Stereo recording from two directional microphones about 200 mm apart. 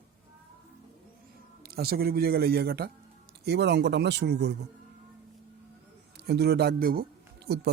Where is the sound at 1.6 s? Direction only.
50° right (ahead or behind).